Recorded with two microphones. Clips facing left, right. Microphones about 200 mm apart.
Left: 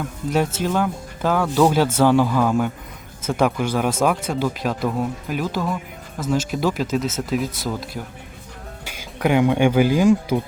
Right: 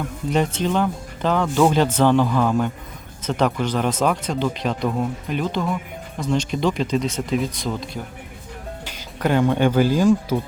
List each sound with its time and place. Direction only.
0.3 s speech: 5° left (ahead or behind)